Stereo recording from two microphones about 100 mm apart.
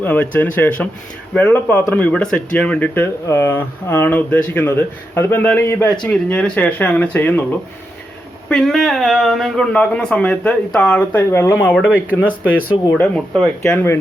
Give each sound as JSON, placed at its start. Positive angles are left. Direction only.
{"t": 0.0, "sound": "speech", "side_deg": 15}
{"t": 3.2, "sound": "speech", "side_deg": 30}
{"t": 8.4, "sound": "speech", "side_deg": 5}
{"t": 9.7, "sound": "speech", "side_deg": 10}
{"t": 12.9, "sound": "speech", "side_deg": 5}